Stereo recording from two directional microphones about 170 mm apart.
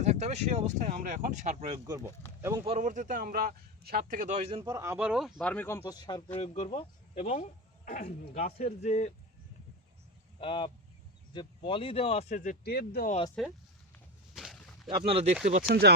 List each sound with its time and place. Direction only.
0.0 s a man's voice: 40° right (ahead or behind)
2.4 s speech: 15° right (ahead or behind)
2.6 s a man's voice: 45° right (ahead or behind); by 5.3 s 5° right (ahead or behind)
5.4 s speech: 10° left (ahead or behind); by 6.3 s 25° left (ahead or behind)
6.3 s speech: 40° left (ahead or behind)
7.3 s speech: 55° left (ahead or behind)
8.4 s speech: 40° left (ahead or behind)
10.4 s speech: 30° left (ahead or behind); by 12.5 s 45° left (ahead or behind)
12.6 s speech: 65° left (ahead or behind)
13.4 s speech: centre (ahead or behind)
14.3 s a sound: centre (ahead or behind)
14.8 s speech: 35° right (ahead or behind)
15.4 s speech: 60° right (ahead or behind)